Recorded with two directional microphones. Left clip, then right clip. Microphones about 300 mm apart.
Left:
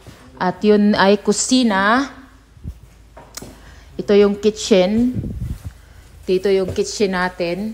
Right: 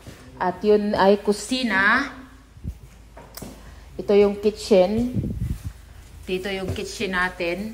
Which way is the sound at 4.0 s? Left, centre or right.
Left.